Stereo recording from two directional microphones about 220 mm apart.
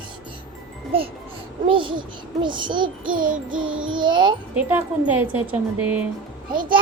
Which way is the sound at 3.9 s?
20° right (ahead or behind).